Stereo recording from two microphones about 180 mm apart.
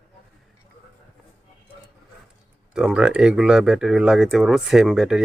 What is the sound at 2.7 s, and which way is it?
Speech, 5° right (ahead or behind).